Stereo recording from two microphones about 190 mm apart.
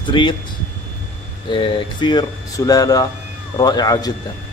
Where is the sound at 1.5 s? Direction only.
25° left (ahead or behind).